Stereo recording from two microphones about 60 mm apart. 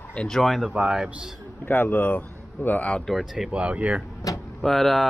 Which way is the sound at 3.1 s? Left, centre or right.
Centre.